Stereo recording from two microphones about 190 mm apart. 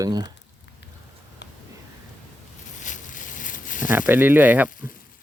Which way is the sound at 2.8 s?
40° left (ahead or behind).